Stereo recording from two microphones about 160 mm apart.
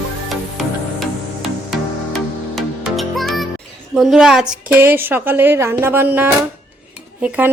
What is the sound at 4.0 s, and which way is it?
A woman's voice, 5° right (ahead or behind).